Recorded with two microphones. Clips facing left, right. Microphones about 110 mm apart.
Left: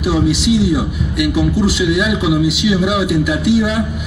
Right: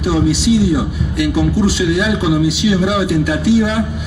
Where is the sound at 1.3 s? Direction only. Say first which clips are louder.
Right 1 dB; 35° right (ahead or behind).